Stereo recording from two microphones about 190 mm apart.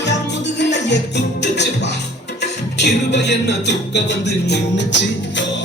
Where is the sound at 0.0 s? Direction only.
65° left (ahead or behind).